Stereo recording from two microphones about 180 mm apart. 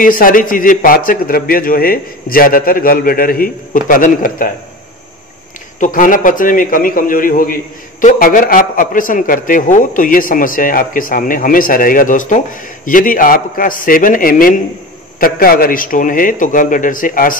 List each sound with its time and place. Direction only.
0.0 s a man's voice: 50° left (ahead or behind)
5.8 s a man's voice: 50° left (ahead or behind)